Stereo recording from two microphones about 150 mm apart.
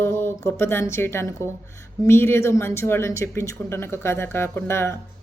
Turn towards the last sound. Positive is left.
turn(degrees=15)  # may be behind; listen again after turning